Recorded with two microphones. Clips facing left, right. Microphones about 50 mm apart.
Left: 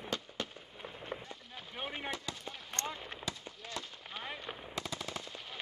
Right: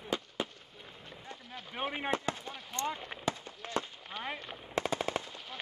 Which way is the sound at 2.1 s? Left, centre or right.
Right.